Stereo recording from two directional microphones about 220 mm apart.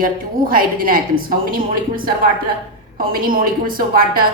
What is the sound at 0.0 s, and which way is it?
Speech, 40° right (ahead or behind).